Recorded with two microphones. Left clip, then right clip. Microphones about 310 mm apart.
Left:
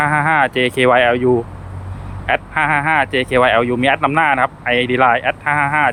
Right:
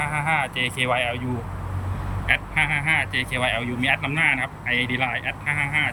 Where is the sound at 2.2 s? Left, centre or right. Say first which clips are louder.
Left 6 dB; centre.